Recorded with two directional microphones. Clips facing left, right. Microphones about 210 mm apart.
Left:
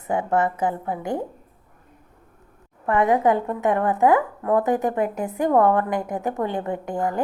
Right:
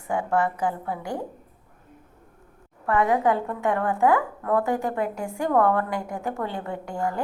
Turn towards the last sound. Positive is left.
turn(degrees=20)  # may be behind; listen again after turning